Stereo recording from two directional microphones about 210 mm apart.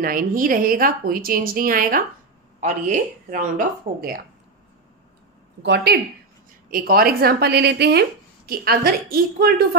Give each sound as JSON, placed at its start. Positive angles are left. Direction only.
{"t": 0.0, "sound": "a woman's voice", "side_deg": -40}
{"t": 5.6, "sound": "speech", "side_deg": -55}
{"t": 6.7, "sound": "a woman's voice", "side_deg": -45}